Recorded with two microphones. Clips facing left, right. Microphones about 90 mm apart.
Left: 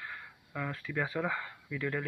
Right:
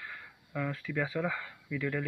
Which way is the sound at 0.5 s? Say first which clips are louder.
Right 2 dB; 25° left (ahead or behind).